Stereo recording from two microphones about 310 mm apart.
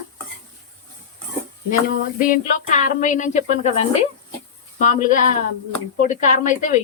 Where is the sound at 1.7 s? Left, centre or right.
Left.